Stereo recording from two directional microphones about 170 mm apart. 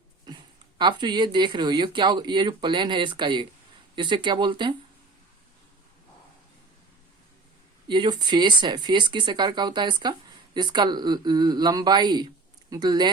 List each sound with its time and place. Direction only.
0.3 s a sound: 25° right (ahead or behind)
0.8 s speech: 25° right (ahead or behind)
7.9 s speech: 25° right (ahead or behind)